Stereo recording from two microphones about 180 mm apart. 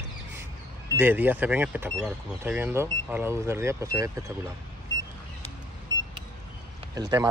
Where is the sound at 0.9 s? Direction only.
10° right (ahead or behind).